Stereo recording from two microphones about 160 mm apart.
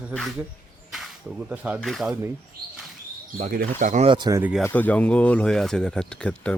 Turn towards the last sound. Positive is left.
turn(degrees=5)  # may be behind; listen again after turning